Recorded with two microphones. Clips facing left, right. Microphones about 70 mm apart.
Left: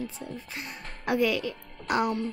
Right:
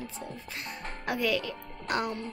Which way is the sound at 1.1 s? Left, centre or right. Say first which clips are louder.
Left 4 dB; centre.